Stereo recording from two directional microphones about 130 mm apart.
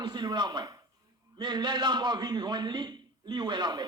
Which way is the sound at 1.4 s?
35° right (ahead or behind).